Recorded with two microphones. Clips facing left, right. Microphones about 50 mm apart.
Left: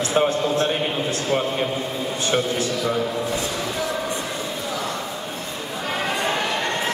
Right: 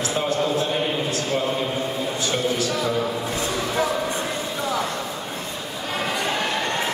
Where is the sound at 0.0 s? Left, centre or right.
Left.